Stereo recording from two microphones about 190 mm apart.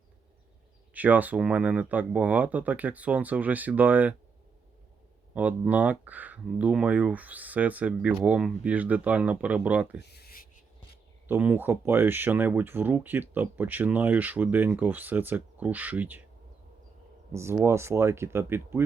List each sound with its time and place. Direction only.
0.9 s speech: 10° right (ahead or behind)
5.3 s speech: 10° right (ahead or behind)
10.0 s a sound: 60° left (ahead or behind)
11.3 s speech: 10° right (ahead or behind)
17.3 s speech: 15° right (ahead or behind)